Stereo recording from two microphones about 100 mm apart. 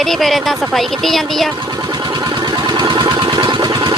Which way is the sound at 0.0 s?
Centre (ahead or behind).